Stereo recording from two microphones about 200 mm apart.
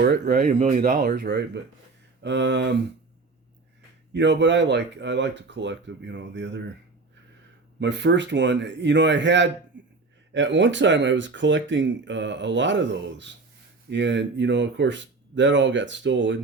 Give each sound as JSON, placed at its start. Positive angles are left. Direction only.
{"t": 0.0, "sound": "speech", "side_deg": -50}
{"t": 4.1, "sound": "speech", "side_deg": -60}
{"t": 7.8, "sound": "speech", "side_deg": -60}